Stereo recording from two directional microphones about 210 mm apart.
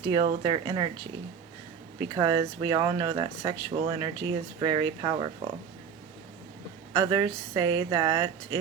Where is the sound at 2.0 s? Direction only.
20° right (ahead or behind).